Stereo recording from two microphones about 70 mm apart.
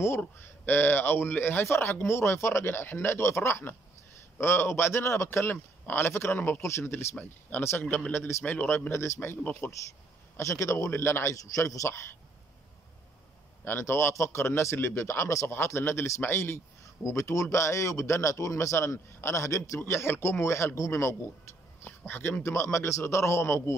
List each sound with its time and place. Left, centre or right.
0.4 s speech: left
8.5 s speech: left
8.9 s speech: left
9.4 s speech: left
10.3 s a man's voice: left
11.3 s a man's voice: left
13.7 s speech: left
21.8 s speech: left